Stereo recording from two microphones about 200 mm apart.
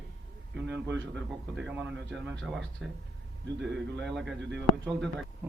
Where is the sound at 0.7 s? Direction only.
65° right (ahead or behind).